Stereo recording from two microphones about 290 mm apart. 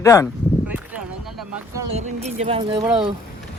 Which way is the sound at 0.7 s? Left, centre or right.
Centre.